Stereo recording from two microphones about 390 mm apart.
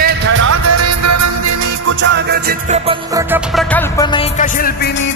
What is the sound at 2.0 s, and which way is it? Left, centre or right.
Music, right.